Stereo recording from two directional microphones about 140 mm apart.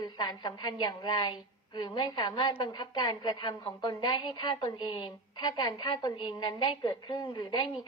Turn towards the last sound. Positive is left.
turn(degrees=30)  # may be behind; listen again after turning